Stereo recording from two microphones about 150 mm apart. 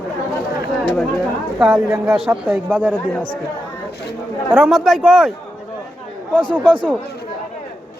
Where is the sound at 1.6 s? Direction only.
15° right (ahead or behind).